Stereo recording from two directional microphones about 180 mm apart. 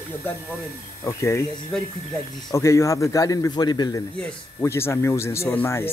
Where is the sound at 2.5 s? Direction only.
15° left (ahead or behind).